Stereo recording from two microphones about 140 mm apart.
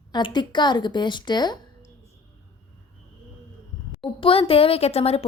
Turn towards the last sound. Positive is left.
turn(degrees=45)  # may be behind; listen again after turning